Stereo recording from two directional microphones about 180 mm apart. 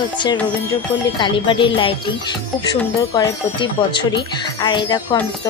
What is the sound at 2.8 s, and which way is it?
Speech, 15° left (ahead or behind).